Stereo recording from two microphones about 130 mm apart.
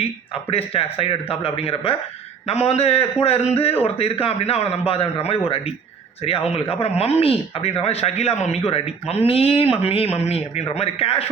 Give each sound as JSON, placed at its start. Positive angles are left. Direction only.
{"t": 0.5, "sound": "speech", "side_deg": 45}